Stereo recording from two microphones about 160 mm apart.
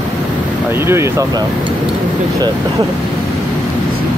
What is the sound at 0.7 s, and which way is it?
Speech, 15° right (ahead or behind).